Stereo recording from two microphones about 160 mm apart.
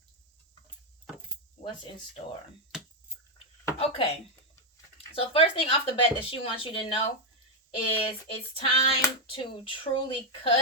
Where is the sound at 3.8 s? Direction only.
35° left (ahead or behind).